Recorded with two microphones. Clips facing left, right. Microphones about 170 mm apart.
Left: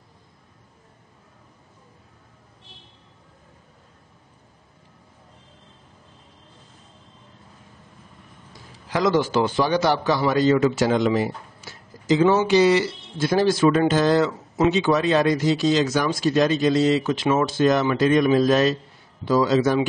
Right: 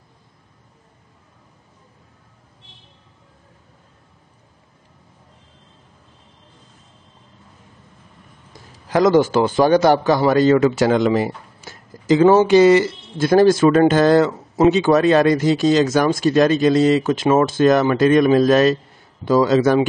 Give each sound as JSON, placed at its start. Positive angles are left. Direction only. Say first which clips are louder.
{"t": 8.9, "sound": "a man's voice", "louder": "right 6 dB", "side_deg": -45}